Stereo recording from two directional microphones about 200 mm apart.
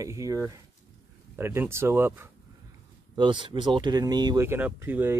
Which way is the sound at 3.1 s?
25° right (ahead or behind).